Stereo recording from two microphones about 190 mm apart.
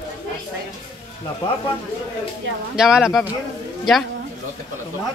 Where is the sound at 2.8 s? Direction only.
5° right (ahead or behind).